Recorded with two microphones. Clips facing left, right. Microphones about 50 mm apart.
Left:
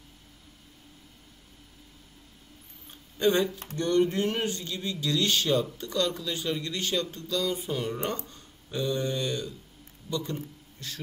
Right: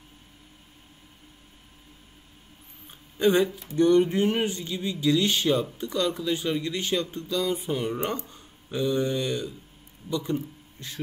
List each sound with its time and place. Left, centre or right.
3.2 s a man's voice: centre